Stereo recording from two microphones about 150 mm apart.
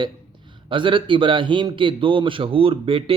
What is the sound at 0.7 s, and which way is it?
Speech, 35° right (ahead or behind).